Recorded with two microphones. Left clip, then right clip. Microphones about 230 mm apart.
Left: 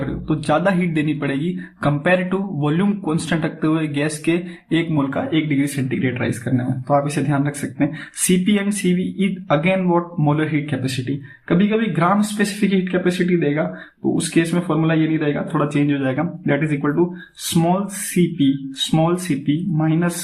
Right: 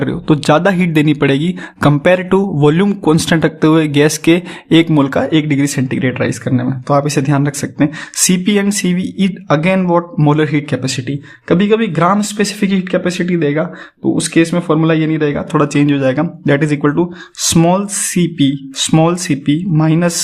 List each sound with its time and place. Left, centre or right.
0.3 s speech: right